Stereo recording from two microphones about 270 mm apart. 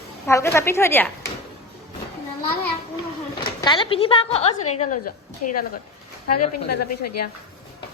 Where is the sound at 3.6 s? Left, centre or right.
Centre.